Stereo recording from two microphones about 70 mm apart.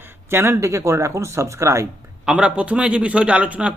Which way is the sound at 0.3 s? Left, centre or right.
Right.